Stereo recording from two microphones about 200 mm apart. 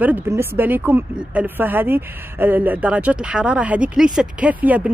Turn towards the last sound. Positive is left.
turn(degrees=-5)  # may be behind; listen again after turning